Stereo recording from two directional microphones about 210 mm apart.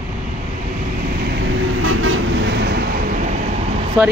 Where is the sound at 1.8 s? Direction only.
80° right; by 3.3 s 40° right (ahead or behind).